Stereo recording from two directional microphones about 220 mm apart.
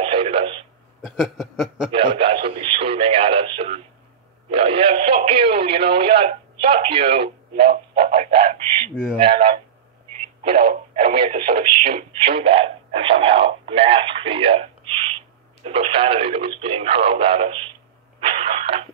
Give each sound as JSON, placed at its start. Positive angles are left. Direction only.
{"t": 0.0, "sound": "radio", "side_deg": -25}
{"t": 1.0, "sound": "a sound", "side_deg": 0}
{"t": 1.9, "sound": "radio", "side_deg": -25}
{"t": 4.5, "sound": "speech", "side_deg": -25}
{"t": 10.5, "sound": "speech", "side_deg": -25}
{"t": 18.2, "sound": "radio", "side_deg": -25}